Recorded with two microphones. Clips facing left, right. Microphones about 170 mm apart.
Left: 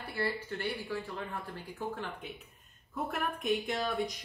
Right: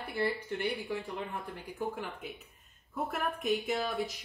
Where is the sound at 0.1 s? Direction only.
15° right (ahead or behind).